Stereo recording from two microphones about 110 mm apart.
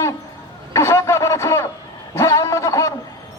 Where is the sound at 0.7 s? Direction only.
25° left (ahead or behind).